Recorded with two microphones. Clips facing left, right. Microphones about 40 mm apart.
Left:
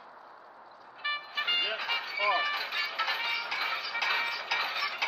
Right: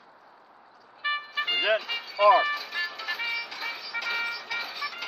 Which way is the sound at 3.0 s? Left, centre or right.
Left.